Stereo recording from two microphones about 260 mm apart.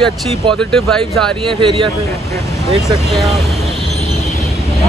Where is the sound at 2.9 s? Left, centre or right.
Centre.